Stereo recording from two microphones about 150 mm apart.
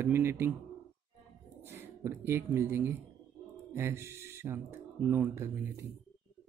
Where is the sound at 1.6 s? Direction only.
15° right (ahead or behind).